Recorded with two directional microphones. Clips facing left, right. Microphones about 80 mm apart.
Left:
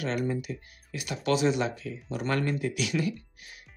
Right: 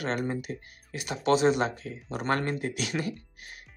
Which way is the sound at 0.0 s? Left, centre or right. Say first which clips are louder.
Even; right.